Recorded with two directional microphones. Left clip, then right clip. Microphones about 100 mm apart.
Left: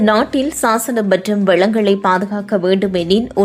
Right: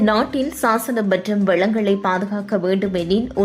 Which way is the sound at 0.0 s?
25° left (ahead or behind).